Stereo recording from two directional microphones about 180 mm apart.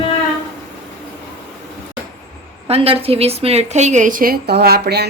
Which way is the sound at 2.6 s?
35° right (ahead or behind).